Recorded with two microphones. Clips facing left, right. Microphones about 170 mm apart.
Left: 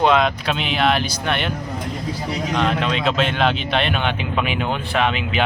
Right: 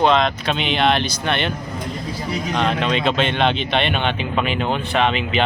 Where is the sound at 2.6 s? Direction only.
Centre (ahead or behind).